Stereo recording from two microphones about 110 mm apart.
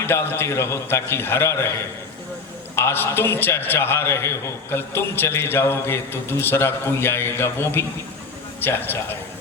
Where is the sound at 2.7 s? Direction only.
20° left (ahead or behind).